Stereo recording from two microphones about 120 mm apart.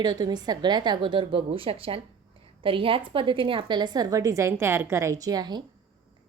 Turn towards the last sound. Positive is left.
turn(degrees=-35)  # may be behind; listen again after turning